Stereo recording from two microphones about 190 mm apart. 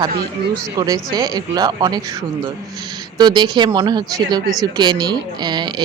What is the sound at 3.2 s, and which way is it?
Speech, 25° right (ahead or behind).